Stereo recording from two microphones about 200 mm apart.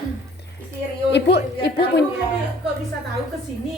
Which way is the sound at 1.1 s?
55° left (ahead or behind).